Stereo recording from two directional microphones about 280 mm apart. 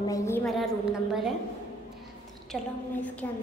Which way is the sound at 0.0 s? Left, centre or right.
Centre.